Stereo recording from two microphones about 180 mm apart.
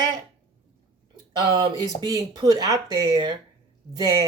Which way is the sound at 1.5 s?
25° right (ahead or behind).